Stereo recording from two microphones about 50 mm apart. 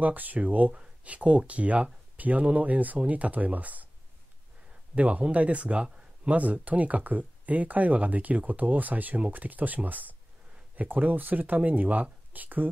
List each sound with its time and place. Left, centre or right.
0.0 s speech: right
4.9 s speech: right